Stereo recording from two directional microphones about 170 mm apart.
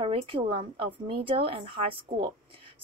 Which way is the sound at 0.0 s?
30° right (ahead or behind).